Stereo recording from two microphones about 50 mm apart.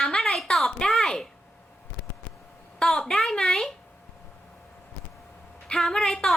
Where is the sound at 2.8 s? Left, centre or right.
Centre.